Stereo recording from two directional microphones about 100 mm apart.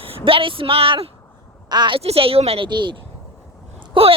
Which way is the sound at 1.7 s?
45° right (ahead or behind).